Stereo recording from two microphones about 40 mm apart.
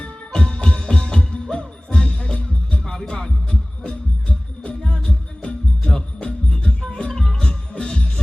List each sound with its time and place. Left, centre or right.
0.3 s music: left